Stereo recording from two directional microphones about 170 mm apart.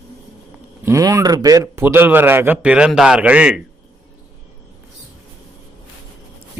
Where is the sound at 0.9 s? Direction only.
20° right (ahead or behind).